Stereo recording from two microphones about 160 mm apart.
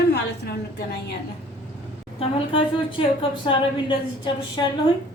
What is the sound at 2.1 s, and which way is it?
A woman's voice, 35° left (ahead or behind).